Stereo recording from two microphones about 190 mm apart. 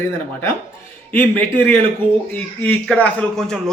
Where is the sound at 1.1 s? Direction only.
10° left (ahead or behind).